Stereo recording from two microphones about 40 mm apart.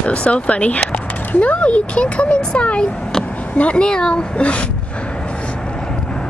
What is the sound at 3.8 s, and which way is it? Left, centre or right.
Speech, centre.